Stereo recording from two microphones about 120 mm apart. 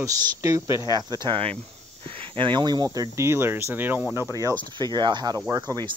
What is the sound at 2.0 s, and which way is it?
Speech, 50° right (ahead or behind).